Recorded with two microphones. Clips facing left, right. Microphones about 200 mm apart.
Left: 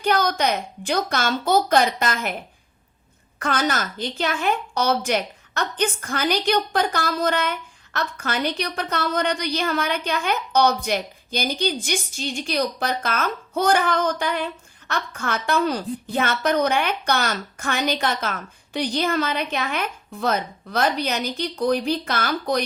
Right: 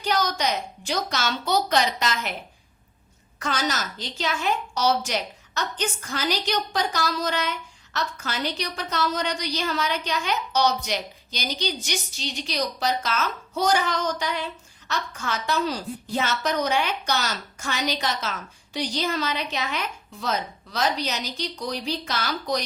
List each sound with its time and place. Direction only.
0.0 s a woman's voice: 55° left (ahead or behind)
3.3 s a woman's voice: 55° left (ahead or behind)